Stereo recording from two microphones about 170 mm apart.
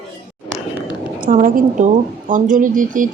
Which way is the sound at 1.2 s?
55° right (ahead or behind).